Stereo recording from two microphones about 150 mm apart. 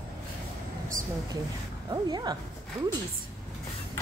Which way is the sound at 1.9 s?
25° right (ahead or behind).